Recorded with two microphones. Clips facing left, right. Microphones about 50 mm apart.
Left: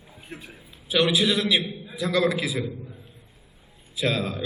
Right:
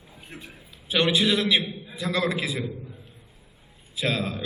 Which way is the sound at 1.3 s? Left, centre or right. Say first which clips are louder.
Even; centre.